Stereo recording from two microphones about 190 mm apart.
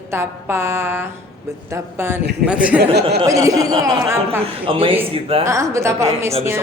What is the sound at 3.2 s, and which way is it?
Speech, 15° right (ahead or behind).